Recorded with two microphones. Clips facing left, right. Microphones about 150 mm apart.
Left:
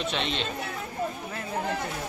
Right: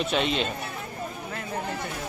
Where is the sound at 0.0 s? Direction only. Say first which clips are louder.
Right 4 dB; 5° right (ahead or behind).